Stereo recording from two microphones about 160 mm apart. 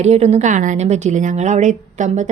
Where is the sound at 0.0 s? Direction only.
40° right (ahead or behind).